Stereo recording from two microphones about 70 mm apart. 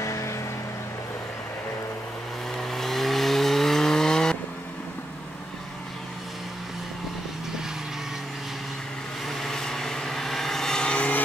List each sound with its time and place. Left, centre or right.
0.0 s music: left
2.5 s chainsaw: centre
9.3 s vehicle: centre